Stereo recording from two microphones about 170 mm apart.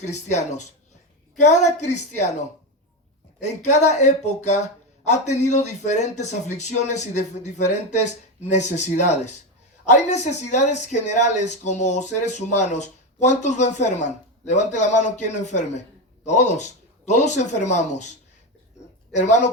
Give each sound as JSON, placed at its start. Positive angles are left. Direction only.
{"t": 0.0, "sound": "speech", "side_deg": 40}
{"t": 3.4, "sound": "speech", "side_deg": 45}
{"t": 19.1, "sound": "speech", "side_deg": 45}